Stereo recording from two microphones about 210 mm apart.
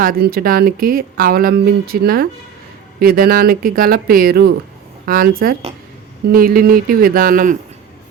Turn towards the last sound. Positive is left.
turn(degrees=-40)  # may be behind; listen again after turning